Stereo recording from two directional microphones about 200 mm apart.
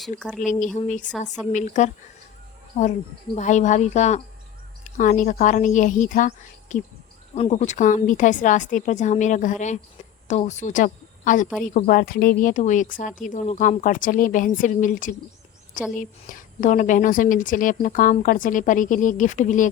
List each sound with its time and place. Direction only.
0.2 s speech: 5° left (ahead or behind)
0.6 s a woman's voice: 40° left (ahead or behind)
3.3 s a woman's voice: 35° left (ahead or behind)